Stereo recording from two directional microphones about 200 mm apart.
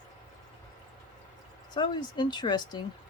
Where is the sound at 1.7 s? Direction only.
20° left (ahead or behind).